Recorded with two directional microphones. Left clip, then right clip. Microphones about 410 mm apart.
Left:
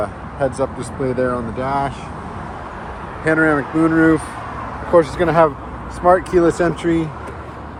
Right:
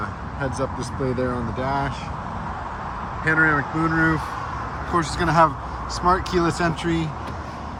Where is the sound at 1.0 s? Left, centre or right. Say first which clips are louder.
Left 6 dB; left.